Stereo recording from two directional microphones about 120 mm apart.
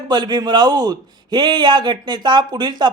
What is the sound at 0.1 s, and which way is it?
Speech, 35° right (ahead or behind).